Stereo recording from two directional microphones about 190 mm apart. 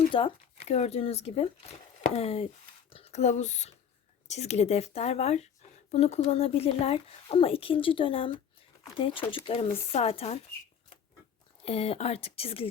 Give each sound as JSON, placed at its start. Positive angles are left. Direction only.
{"t": 0.1, "sound": "speech", "side_deg": 30}
{"t": 11.6, "sound": "speech", "side_deg": 30}